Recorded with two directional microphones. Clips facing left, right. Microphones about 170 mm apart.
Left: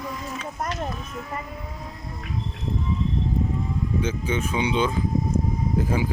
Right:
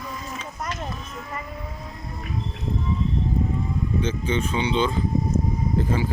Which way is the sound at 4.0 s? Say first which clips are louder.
Right 2 dB; 10° left (ahead or behind).